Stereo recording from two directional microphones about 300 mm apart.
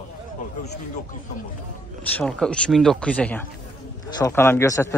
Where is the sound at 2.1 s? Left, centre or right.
Centre.